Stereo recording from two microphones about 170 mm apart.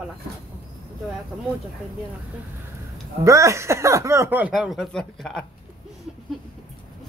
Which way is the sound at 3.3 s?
20° right (ahead or behind).